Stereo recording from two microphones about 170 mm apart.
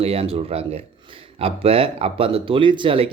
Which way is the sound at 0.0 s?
35° right (ahead or behind).